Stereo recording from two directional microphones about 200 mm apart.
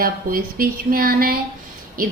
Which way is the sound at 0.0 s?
45° right (ahead or behind).